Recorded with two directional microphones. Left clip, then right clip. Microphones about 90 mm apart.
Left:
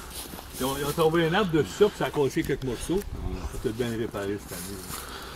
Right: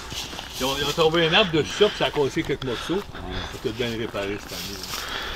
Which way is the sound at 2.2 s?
10° left (ahead or behind).